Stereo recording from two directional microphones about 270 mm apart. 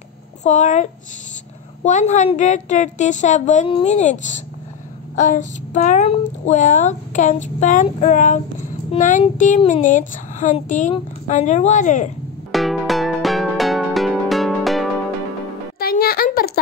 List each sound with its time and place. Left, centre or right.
0.4 s speech: left
1.9 s speech: left
12.5 s music: centre
15.8 s music: left